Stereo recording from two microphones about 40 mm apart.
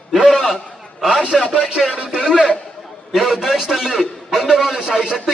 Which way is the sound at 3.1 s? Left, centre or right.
Centre.